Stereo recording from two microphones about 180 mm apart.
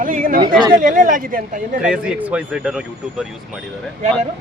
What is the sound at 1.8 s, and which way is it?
Speech, 5° right (ahead or behind).